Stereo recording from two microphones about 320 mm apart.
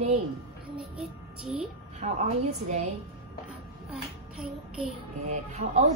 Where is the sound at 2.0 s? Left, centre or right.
Centre.